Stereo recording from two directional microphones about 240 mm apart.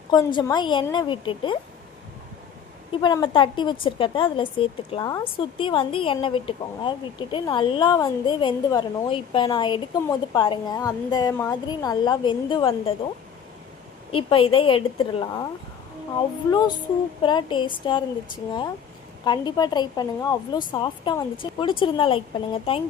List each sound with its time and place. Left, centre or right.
0.1 s a woman's voice: centre
2.9 s a woman's voice: centre
14.1 s a woman's voice: left
16.5 s a woman's voice: centre
19.2 s a woman's voice: centre